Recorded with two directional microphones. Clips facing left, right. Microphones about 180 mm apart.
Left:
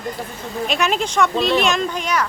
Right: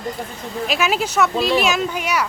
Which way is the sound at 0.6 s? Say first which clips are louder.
Even; 5° right (ahead or behind).